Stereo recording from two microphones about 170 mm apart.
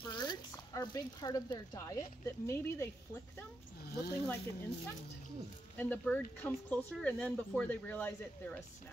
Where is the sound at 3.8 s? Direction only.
70° left (ahead or behind).